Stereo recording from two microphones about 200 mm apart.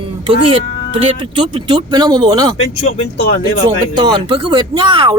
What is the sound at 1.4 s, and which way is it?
Speech, 25° right (ahead or behind).